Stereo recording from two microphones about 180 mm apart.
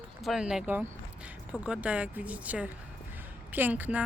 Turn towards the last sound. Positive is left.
turn(degrees=-10)  # may be behind; listen again after turning